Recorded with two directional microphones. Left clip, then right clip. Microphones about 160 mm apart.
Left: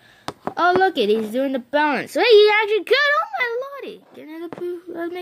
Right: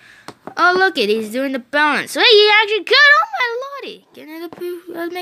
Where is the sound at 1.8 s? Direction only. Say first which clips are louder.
Right 6 dB; 5° left (ahead or behind).